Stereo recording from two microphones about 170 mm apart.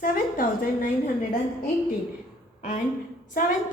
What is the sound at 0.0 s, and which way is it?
Speech, 55° left (ahead or behind).